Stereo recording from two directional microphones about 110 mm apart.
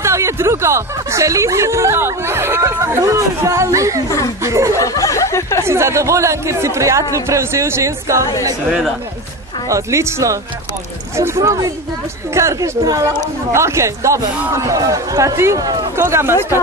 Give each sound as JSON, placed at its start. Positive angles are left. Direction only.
{"t": 0.0, "sound": "speech", "side_deg": -25}
{"t": 4.7, "sound": "speech", "side_deg": 30}
{"t": 5.7, "sound": "speech", "side_deg": -25}
{"t": 9.7, "sound": "speech", "side_deg": -30}